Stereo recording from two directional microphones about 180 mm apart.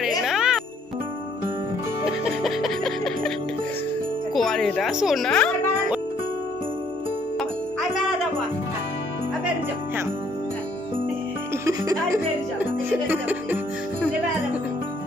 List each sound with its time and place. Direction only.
0.3 s jingle: 5° right (ahead or behind)
2.4 s music: centre (ahead or behind)
4.3 s speech: centre (ahead or behind)
11.6 s music: 20° right (ahead or behind)